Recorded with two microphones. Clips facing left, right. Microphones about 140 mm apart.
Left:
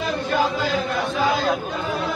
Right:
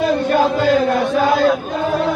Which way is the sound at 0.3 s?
60° right (ahead or behind).